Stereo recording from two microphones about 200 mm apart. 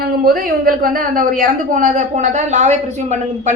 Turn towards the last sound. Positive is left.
turn(degrees=-35)  # may be behind; listen again after turning